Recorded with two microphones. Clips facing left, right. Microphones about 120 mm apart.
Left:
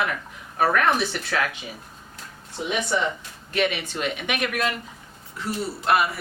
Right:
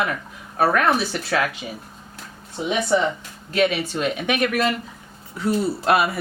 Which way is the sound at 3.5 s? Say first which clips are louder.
Right 4 dB; 35° right (ahead or behind).